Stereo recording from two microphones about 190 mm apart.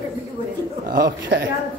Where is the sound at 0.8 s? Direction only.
50° right (ahead or behind).